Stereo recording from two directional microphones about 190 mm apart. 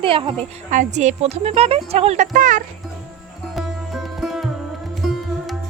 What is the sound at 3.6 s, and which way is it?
Sitar, centre (ahead or behind).